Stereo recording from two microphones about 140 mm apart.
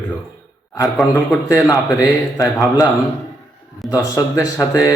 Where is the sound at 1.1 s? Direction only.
20° left (ahead or behind).